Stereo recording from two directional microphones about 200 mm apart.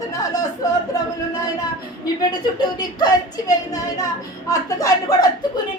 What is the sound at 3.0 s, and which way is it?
A woman's voice, 20° left (ahead or behind).